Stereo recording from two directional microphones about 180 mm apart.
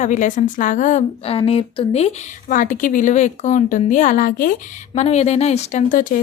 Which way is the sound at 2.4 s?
50° left (ahead or behind).